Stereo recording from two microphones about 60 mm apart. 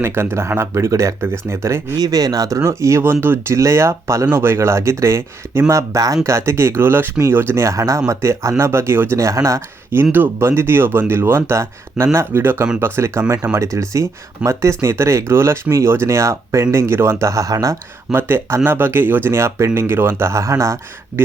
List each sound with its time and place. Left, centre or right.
0.0 s speech: right
2.0 s speech: right
6.2 s speech: right
7.6 s speech: right
9.9 s speech: right
13.6 s speech: right
18.1 s speech: right
20.3 s speech: right